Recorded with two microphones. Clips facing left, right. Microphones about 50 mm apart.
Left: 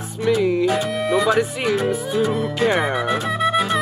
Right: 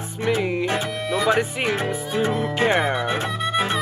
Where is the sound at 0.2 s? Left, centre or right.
Right.